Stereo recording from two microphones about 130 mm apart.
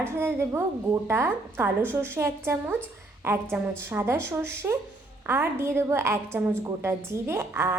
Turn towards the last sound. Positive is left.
turn(degrees=-20)  # may be behind; listen again after turning